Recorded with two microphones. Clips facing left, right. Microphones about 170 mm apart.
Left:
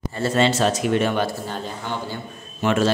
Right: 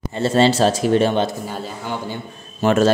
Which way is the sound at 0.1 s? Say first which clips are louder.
Right 4 dB; 30° right (ahead or behind).